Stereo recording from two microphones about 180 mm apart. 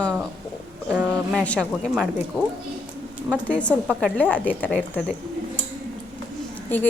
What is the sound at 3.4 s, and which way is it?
A woman's voice, 5° left (ahead or behind).